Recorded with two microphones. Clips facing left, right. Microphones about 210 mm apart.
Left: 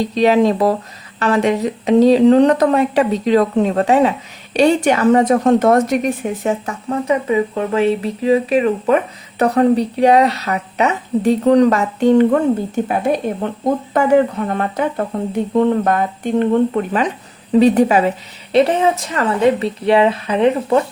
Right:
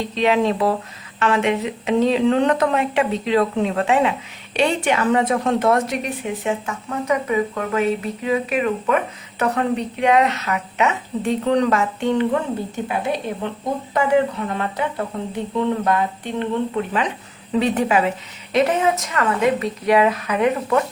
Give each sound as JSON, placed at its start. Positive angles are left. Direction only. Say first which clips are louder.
{"t": 0.0, "sound": "a woman's voice", "louder": "left 5 dB", "side_deg": 40}